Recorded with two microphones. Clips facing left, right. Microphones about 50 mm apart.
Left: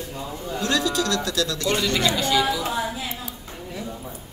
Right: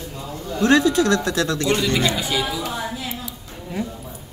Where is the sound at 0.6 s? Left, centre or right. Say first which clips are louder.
Right 7 dB; right.